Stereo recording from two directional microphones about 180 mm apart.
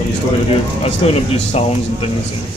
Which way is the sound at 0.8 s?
35° left (ahead or behind).